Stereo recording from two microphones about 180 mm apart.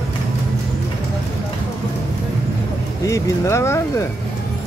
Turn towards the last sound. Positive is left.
turn(degrees=15)  # may be behind; listen again after turning